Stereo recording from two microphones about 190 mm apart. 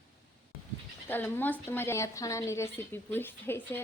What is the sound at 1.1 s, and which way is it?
A woman's voice, 10° left (ahead or behind).